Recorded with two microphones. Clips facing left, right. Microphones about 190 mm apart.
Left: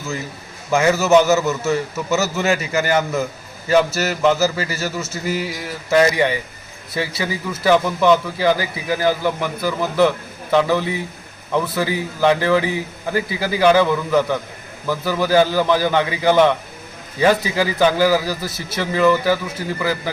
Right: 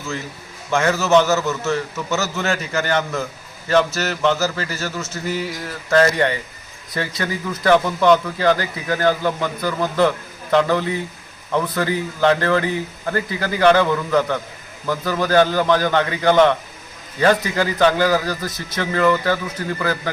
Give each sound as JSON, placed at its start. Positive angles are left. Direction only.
{"t": 0.7, "sound": "a man's voice", "side_deg": 5}